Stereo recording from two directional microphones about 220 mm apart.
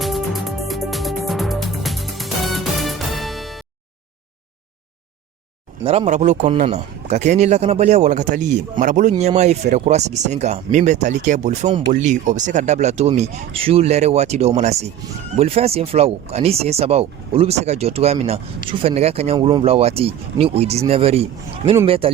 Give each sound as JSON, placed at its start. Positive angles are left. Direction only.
{"t": 0.0, "sound": "music", "side_deg": 0}
{"t": 5.8, "sound": "a man's voice", "side_deg": -25}